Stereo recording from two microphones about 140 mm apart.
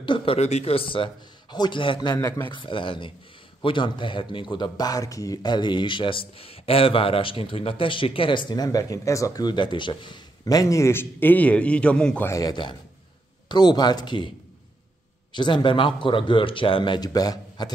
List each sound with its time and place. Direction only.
0.0 s speech: 35° left (ahead or behind)
2.1 s speech: 20° left (ahead or behind)
2.4 s speech: 35° left (ahead or behind); by 12.3 s 5° left (ahead or behind)
12.3 s speech: 25° left (ahead or behind)
15.3 s speech: 35° left (ahead or behind)